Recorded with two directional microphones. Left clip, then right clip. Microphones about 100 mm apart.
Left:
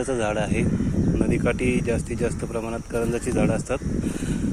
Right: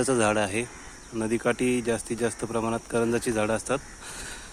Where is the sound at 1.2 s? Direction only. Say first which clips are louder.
Even; 30° right (ahead or behind).